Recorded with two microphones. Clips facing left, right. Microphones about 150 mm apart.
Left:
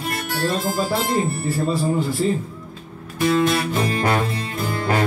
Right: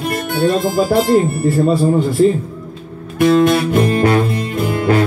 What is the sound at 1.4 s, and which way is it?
Music, 55° right (ahead or behind).